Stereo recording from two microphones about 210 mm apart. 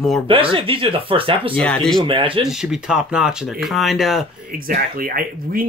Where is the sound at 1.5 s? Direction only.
5° left (ahead or behind).